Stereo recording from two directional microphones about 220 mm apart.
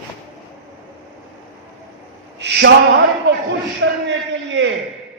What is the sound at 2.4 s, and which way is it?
Speech, 55° right (ahead or behind).